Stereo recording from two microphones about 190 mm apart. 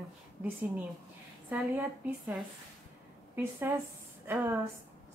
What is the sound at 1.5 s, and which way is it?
Speech, 5° right (ahead or behind).